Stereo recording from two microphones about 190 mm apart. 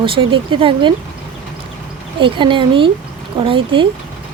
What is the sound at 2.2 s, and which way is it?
Speech, 25° right (ahead or behind).